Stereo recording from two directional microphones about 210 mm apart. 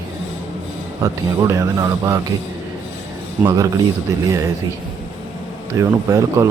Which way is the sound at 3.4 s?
15° right (ahead or behind).